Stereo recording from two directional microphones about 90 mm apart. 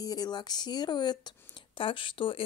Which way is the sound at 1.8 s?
70° left (ahead or behind).